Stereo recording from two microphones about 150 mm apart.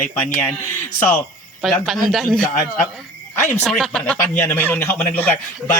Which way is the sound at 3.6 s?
5° left (ahead or behind).